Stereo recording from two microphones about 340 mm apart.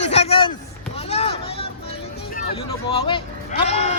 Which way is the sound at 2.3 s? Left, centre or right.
Centre.